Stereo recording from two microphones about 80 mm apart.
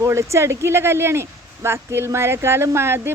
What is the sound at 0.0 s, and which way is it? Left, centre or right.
A woman's voice, right.